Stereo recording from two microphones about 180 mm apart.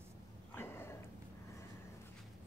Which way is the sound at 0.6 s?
15° left (ahead or behind).